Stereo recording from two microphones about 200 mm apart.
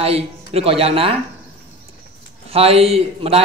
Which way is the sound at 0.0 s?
30° right (ahead or behind).